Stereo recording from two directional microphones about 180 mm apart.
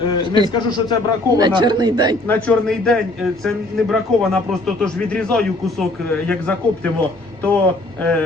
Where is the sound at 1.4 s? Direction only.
25° right (ahead or behind).